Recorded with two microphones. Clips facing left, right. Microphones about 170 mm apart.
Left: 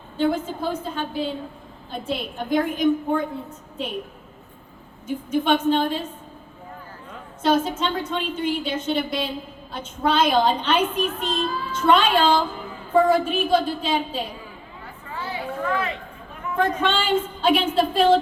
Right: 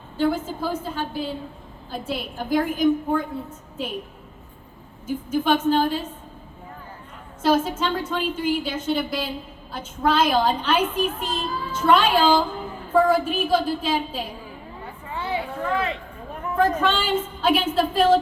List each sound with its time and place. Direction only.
0.2 s a woman's voice: 5° right (ahead or behind)
5.0 s a woman's voice: 5° right (ahead or behind)
7.4 s a woman's voice: 5° right (ahead or behind)
15.1 s a sound: 25° right (ahead or behind)
16.6 s a woman's voice: 5° right (ahead or behind)